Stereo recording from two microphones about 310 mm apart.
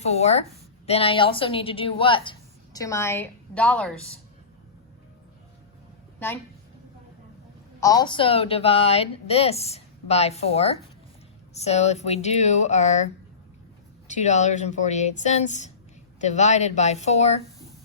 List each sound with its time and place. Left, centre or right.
0.0 s a woman's voice: left; by 4.2 s centre
6.1 s speech: centre
7.8 s a woman's voice: centre
14.1 s a woman's voice: left